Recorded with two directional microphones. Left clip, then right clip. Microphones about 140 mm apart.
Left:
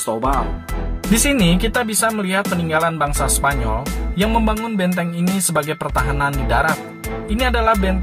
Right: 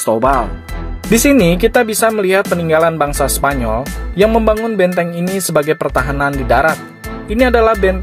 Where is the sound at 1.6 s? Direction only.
55° right (ahead or behind).